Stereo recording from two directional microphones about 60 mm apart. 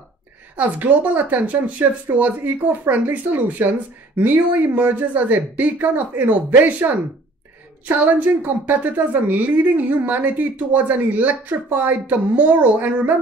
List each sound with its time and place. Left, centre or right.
0.6 s a woman's voice: right
7.9 s a woman's voice: right